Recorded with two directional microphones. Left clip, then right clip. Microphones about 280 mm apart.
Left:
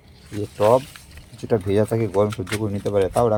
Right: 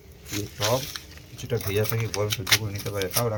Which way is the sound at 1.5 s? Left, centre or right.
Left.